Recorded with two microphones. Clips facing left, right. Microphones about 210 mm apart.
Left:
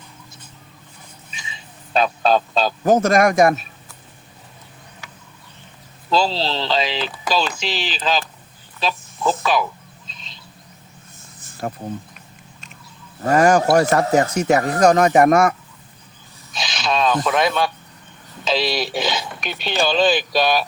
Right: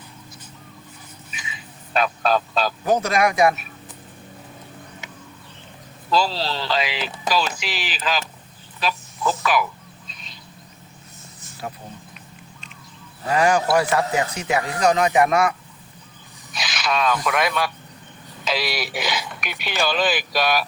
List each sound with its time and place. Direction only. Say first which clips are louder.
1.3 s goose: right 1 dB; 25° left (ahead or behind)
2.8 s speech: left 6 dB; 45° left (ahead or behind)
6.1 s speech: left 2 dB; 25° left (ahead or behind)
8.8 s a sound: left 2 dB; 25° left (ahead or behind)
9.4 s speech: even; 25° left (ahead or behind)
11.3 s a sound: left 6 dB; 50° left (ahead or behind)
13.2 s speech: left 5 dB; 45° left (ahead or behind)
16.5 s snake: left 2 dB; 25° left (ahead or behind)
17.2 s speech: left 3 dB; 25° left (ahead or behind)